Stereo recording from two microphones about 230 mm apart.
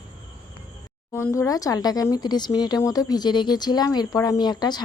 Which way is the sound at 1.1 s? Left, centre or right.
Centre.